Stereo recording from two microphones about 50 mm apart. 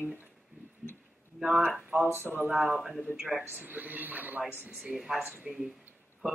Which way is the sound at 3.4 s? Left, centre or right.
Right.